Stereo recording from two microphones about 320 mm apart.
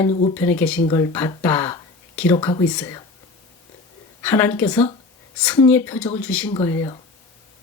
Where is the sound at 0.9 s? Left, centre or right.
Centre.